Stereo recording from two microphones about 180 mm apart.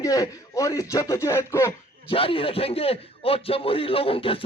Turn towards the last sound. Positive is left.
turn(degrees=30)  # may be behind; listen again after turning